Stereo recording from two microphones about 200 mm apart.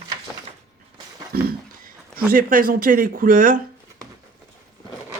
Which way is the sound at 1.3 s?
50° right (ahead or behind).